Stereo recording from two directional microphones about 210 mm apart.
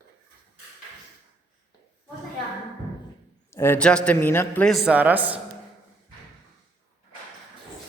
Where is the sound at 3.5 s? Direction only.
10° left (ahead or behind); by 5.4 s 5° right (ahead or behind).